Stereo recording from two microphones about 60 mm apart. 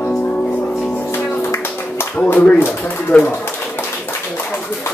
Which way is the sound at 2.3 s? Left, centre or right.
Left.